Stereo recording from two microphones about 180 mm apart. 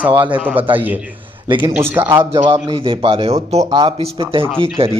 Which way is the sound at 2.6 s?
30° right (ahead or behind).